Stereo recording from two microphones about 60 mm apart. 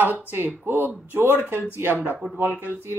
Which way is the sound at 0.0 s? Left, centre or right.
Right.